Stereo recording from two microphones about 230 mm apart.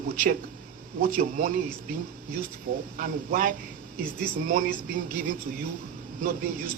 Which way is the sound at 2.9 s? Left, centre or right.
Right.